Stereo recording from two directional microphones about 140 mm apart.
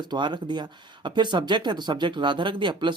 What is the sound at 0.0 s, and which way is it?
Speech, 30° right (ahead or behind).